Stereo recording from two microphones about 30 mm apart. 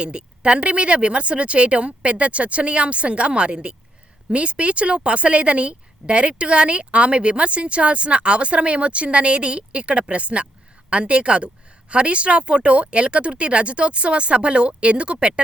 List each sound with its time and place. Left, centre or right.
0.0 s a woman's voice: right